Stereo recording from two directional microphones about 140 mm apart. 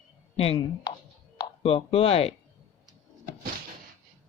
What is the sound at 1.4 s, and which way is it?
Speech, 45° left (ahead or behind).